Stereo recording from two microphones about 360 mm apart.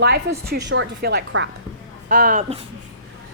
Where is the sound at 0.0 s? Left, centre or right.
Right.